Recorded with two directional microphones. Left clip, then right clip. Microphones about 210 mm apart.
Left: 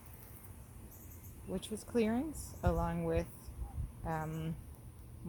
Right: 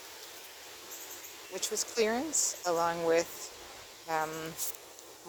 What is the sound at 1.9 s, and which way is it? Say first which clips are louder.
A woman's voice: right 4 dB; 5° right (ahead or behind).